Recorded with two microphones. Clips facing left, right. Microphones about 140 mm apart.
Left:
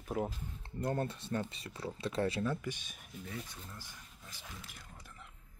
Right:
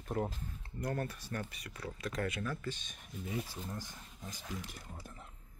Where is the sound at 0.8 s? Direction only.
25° left (ahead or behind).